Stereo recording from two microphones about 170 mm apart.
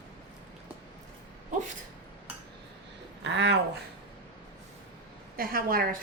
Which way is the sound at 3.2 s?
90° right.